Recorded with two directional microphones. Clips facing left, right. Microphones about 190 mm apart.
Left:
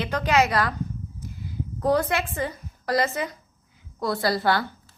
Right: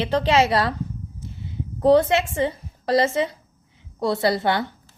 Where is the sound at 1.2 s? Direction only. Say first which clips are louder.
Right 1 dB; 25° right (ahead or behind).